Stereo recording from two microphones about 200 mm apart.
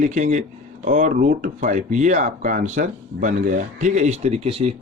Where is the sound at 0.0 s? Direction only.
35° right (ahead or behind).